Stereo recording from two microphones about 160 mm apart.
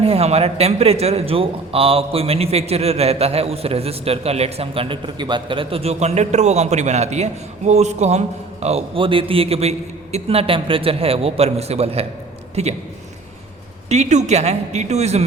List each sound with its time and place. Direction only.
0.0 s a man's voice: 40° right (ahead or behind)
13.9 s a woman's voice: 45° right (ahead or behind)